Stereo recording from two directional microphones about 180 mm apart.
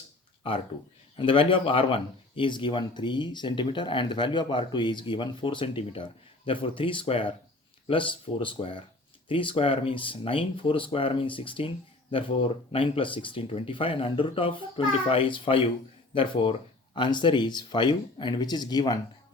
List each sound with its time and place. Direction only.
1.1 s speech: 30° left (ahead or behind)